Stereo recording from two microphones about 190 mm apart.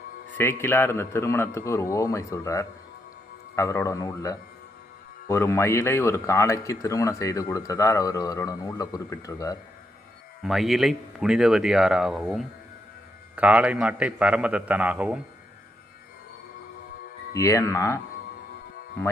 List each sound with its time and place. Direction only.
0.3 s speech: 10° left (ahead or behind)
10.4 s a man's voice: centre (ahead or behind)
17.3 s speech: 15° left (ahead or behind)